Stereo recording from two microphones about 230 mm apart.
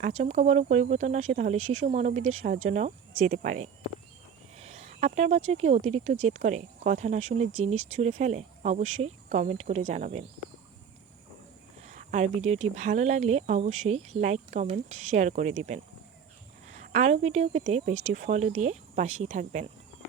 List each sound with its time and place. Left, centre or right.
0.0 s speech: right
11.8 s a sound: right
12.7 s speech: right